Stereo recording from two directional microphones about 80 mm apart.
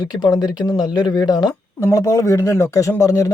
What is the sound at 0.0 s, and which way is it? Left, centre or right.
Speech, left.